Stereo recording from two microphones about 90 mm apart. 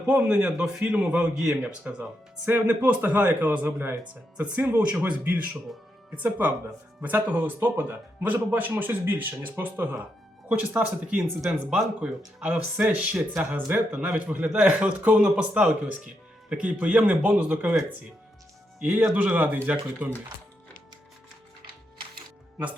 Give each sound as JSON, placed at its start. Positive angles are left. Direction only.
{"t": 0.1, "sound": "a man's voice", "side_deg": -15}